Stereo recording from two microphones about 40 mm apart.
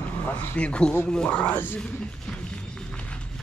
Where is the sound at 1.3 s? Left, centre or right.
Left.